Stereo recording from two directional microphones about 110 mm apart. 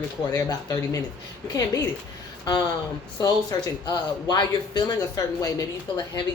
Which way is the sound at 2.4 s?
35° left (ahead or behind).